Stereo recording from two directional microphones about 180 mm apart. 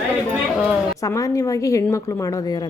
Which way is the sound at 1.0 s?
20° left (ahead or behind).